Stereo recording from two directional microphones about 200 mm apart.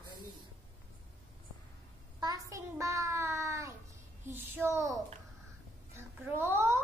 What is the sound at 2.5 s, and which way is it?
A child's voice, 15° right (ahead or behind).